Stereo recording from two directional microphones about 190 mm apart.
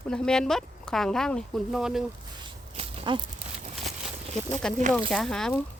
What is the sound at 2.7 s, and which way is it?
Horse, 30° right (ahead or behind).